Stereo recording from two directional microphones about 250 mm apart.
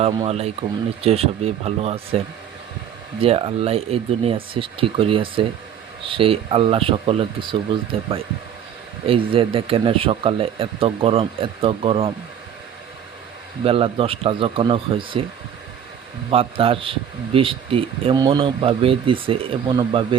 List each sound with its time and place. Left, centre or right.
0.3 s speech: right
13.7 s speech: right
16.3 s speech: right